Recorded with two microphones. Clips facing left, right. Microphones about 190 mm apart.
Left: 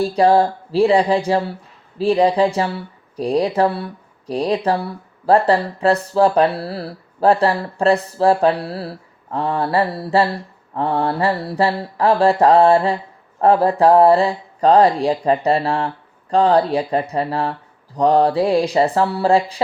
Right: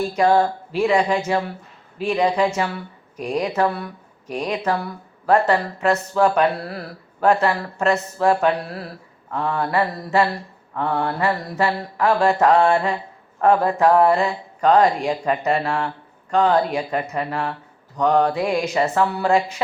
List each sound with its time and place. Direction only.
0.0 s speech: 35° left (ahead or behind)